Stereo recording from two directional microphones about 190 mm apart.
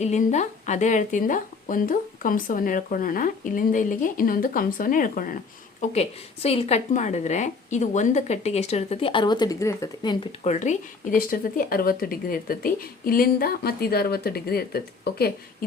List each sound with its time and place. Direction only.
0.0 s speech: 35° left (ahead or behind)
5.8 s a woman's voice: 35° left (ahead or behind)
10.4 s speech: 40° left (ahead or behind); by 15.3 s 55° left (ahead or behind)